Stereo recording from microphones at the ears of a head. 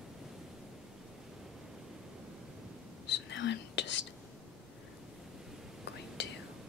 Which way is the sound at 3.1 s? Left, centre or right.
Left.